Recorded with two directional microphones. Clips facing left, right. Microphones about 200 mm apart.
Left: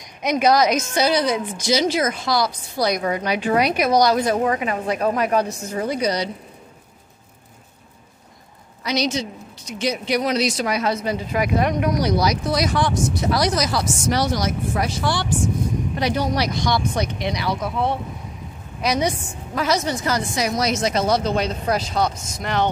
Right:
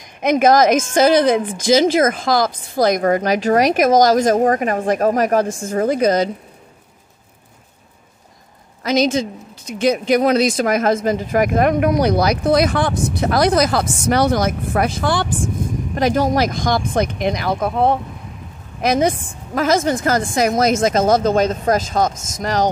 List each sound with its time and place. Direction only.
0.2 s speech: 50° right (ahead or behind)
8.8 s speech: 50° right (ahead or behind)